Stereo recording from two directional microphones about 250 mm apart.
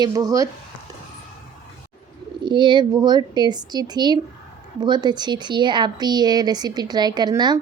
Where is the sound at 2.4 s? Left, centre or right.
Centre.